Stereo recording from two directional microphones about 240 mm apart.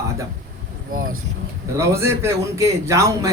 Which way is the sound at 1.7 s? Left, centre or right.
Centre.